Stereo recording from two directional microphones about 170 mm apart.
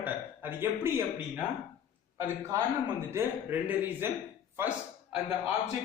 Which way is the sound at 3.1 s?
10° right (ahead or behind).